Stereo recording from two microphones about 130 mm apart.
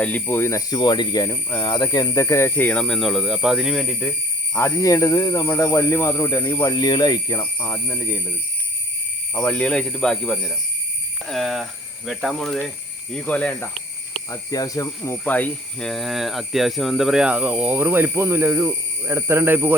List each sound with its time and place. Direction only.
0.0 s speech: 15° left (ahead or behind)
0.7 s speech: 35° left (ahead or behind); by 4.1 s centre (ahead or behind)
4.5 s speech: 20° left (ahead or behind)
9.3 s speech: 10° left (ahead or behind)
14.3 s speech: 25° left (ahead or behind)
15.9 s speech: centre (ahead or behind); by 19.7 s 15° right (ahead or behind)